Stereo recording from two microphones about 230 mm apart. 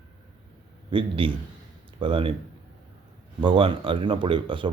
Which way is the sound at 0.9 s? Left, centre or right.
Right.